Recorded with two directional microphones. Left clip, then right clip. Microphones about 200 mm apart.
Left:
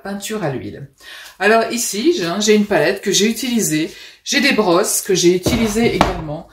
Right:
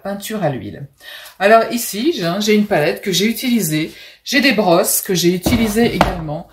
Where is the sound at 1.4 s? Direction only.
10° left (ahead or behind).